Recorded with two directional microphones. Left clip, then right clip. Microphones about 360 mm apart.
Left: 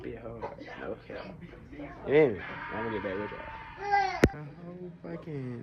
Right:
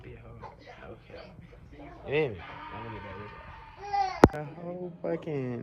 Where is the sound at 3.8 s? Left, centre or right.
Centre.